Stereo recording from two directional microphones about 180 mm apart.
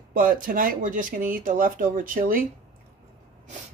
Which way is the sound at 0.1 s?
50° right (ahead or behind).